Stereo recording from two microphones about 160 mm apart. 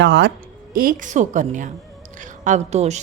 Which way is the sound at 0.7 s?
65° right (ahead or behind).